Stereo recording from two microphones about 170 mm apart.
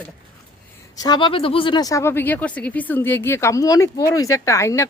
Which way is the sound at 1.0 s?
25° left (ahead or behind).